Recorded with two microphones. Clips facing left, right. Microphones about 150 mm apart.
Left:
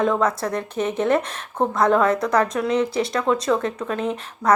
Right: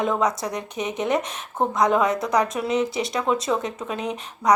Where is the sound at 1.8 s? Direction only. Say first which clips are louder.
Left 2 dB; 15° right (ahead or behind).